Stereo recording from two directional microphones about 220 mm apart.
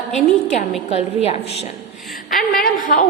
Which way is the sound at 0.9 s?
30° left (ahead or behind).